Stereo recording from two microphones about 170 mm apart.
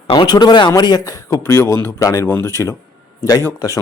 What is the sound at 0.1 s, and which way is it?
A man's voice, 25° left (ahead or behind).